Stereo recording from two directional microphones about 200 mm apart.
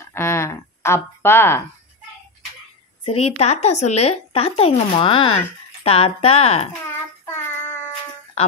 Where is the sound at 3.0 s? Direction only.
30° left (ahead or behind).